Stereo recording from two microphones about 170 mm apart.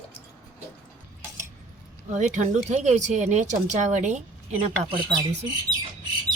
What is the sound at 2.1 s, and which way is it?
Speech, 45° right (ahead or behind).